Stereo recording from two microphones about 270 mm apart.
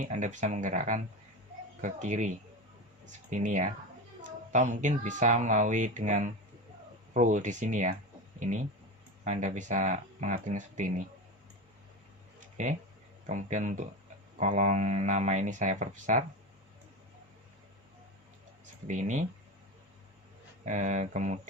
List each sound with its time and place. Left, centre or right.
0.0 s speech: right
12.4 s a sound: right
13.2 s speech: right
18.6 s speech: right
20.7 s speech: right